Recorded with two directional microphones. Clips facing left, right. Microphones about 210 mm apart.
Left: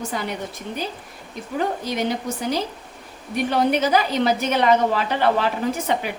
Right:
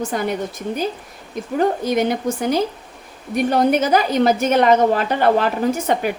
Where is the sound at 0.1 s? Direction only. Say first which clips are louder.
Right 5 dB; 50° right (ahead or behind).